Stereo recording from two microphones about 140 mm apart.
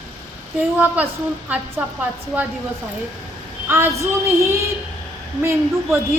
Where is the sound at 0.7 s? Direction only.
10° right (ahead or behind).